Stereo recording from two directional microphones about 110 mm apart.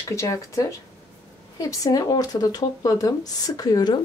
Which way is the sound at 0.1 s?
25° left (ahead or behind).